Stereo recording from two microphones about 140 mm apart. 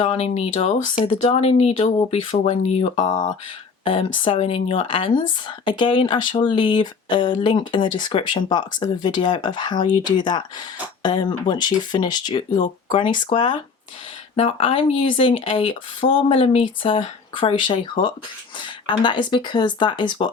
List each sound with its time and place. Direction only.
0.0 s speech: 45° left (ahead or behind)
3.8 s speech: 40° left (ahead or behind)
14.3 s speech: 45° left (ahead or behind)